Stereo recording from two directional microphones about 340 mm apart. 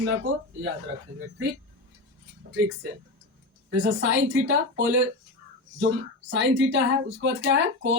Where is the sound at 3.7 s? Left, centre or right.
Right.